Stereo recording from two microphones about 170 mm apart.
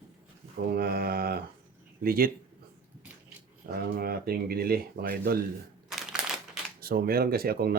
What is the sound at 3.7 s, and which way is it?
Speech, 60° right (ahead or behind).